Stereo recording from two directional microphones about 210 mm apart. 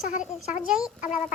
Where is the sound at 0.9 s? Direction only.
35° left (ahead or behind).